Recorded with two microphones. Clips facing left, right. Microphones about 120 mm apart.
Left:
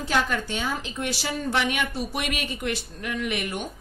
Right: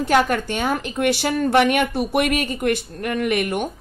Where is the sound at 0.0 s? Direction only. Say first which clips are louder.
Right 7 dB; 55° right (ahead or behind).